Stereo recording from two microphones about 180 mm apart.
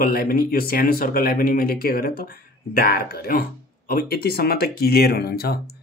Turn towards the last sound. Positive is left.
turn(degrees=60)  # may be behind; listen again after turning